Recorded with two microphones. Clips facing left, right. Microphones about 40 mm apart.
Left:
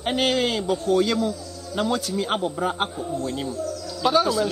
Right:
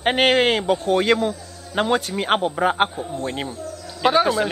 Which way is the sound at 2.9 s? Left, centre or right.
Right.